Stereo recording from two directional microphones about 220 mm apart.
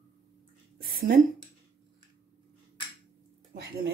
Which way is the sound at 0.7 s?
45° right (ahead or behind).